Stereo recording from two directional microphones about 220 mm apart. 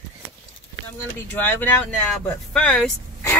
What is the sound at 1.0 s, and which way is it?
Speech, 10° left (ahead or behind).